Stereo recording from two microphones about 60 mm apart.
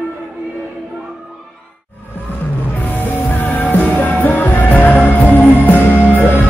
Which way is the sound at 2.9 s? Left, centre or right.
Left.